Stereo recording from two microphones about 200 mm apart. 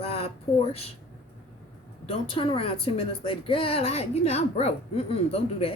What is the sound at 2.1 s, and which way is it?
Speech, 25° left (ahead or behind).